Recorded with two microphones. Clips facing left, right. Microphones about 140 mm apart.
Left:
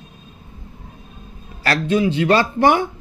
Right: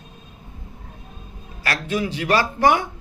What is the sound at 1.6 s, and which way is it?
A man's voice, 30° left (ahead or behind).